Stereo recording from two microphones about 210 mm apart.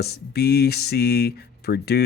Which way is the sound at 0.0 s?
50° left (ahead or behind).